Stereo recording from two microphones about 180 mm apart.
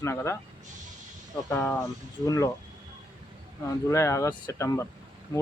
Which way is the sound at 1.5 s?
15° left (ahead or behind).